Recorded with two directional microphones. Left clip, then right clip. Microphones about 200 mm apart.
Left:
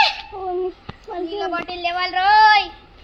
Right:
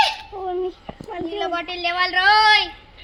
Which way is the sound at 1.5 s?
60° right (ahead or behind).